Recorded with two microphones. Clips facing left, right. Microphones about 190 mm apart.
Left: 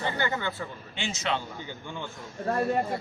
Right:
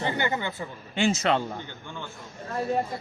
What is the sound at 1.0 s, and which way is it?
Speech, 50° right (ahead or behind).